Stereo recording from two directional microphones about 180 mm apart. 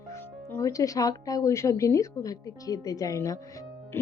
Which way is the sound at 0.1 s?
15° left (ahead or behind).